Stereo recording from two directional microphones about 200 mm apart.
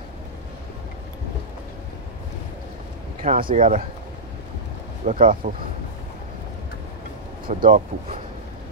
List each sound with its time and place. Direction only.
3.2 s speech: 45° right (ahead or behind)
5.0 s speech: 40° right (ahead or behind)
7.4 s speech: 45° right (ahead or behind)